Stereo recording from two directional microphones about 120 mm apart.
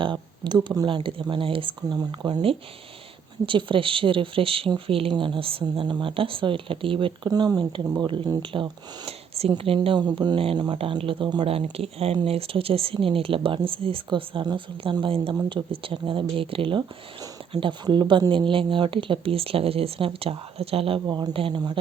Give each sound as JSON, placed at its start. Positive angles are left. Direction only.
{"t": 0.0, "sound": "speech", "side_deg": -40}
{"t": 2.0, "sound": "speech", "side_deg": -35}
{"t": 3.4, "sound": "speech", "side_deg": -45}
{"t": 7.3, "sound": "speech", "side_deg": -35}
{"t": 11.4, "sound": "speech", "side_deg": -55}
{"t": 21.1, "sound": "speech", "side_deg": -35}
{"t": 21.3, "sound": "speech", "side_deg": -50}